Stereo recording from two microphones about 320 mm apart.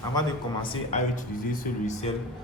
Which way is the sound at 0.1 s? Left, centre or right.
Centre.